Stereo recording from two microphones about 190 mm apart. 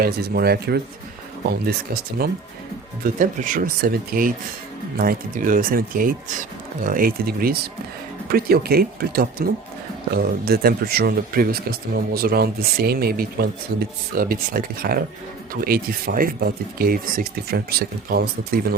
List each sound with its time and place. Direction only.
0.0 s speech: 55° right (ahead or behind)